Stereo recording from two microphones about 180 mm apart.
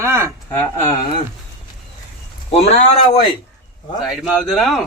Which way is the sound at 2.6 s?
35° left (ahead or behind).